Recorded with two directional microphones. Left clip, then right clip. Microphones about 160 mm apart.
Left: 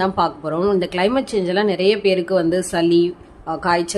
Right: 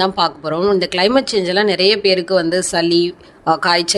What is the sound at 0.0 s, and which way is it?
Speech, 45° right (ahead or behind).